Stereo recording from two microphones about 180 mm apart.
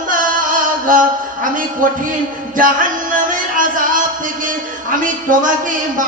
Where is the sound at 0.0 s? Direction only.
50° right (ahead or behind).